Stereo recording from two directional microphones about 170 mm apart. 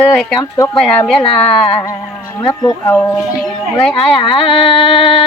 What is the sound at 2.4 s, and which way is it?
Speech, 30° left (ahead or behind).